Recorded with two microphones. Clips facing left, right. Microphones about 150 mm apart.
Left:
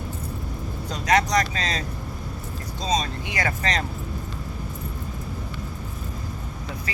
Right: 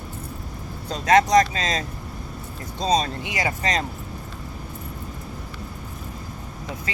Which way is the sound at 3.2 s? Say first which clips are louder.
Right 1 dB; 15° right (ahead or behind).